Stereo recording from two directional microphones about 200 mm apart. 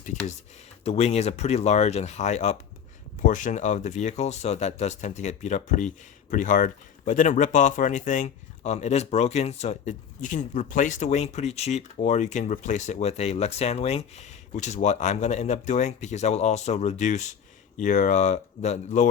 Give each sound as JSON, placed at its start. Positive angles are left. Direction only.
{"t": 0.0, "sound": "speech", "side_deg": 40}